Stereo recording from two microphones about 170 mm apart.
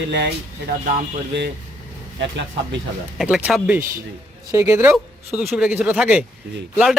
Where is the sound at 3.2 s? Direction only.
5° right (ahead or behind).